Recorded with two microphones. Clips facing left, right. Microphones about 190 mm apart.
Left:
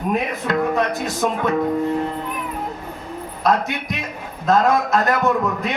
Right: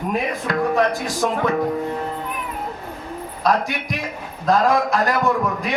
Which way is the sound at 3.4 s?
25° left (ahead or behind).